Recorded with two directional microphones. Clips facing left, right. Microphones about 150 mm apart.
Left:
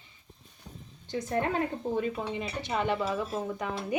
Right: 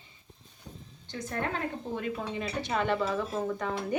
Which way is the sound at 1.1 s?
30° left (ahead or behind).